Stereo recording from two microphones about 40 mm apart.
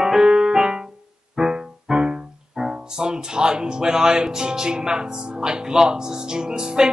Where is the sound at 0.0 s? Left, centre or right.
Centre.